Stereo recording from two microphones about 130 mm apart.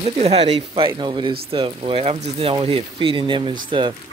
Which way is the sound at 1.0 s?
35° right (ahead or behind).